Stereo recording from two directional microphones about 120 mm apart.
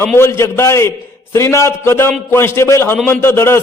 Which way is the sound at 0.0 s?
20° left (ahead or behind).